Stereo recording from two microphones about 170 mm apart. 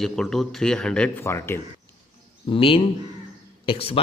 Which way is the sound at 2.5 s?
30° left (ahead or behind).